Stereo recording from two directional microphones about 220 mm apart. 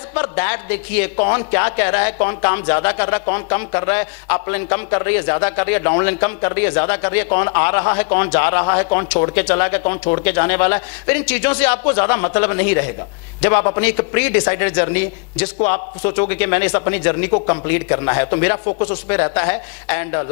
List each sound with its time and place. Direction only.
0.1 s speech: 10° left (ahead or behind)